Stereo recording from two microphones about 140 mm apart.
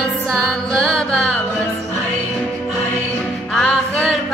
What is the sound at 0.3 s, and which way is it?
Music, 5° left (ahead or behind).